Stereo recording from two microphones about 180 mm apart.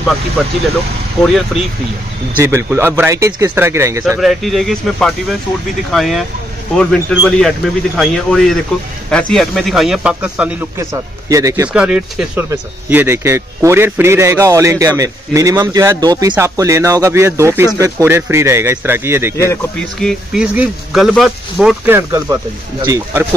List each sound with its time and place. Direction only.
1.2 s a man's voice: centre (ahead or behind)
2.4 s a man's voice: 15° right (ahead or behind)
4.2 s a man's voice: centre (ahead or behind); by 11.7 s 20° right (ahead or behind)
11.7 s a man's voice: 5° right (ahead or behind)
20.0 s a man's voice: centre (ahead or behind); by 23.2 s 15° right (ahead or behind)